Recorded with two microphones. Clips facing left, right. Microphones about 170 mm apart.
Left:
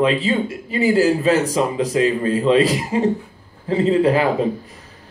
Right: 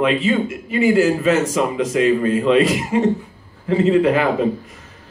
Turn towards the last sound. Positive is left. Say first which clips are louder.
# right 1 dB
turn(degrees=35)  # may be behind; listen again after turning